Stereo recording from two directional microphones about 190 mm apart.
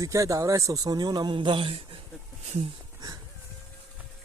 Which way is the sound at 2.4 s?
35° right (ahead or behind).